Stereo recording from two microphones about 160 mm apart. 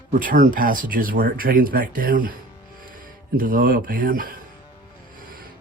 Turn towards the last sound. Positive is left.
turn(degrees=-60)  # may be behind; listen again after turning